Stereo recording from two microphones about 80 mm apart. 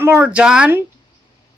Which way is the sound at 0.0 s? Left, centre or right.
Right.